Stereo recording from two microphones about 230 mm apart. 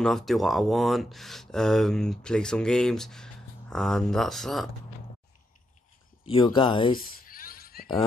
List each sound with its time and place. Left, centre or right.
0.0 s speech: centre
6.2 s speech: left
7.0 s a sound: left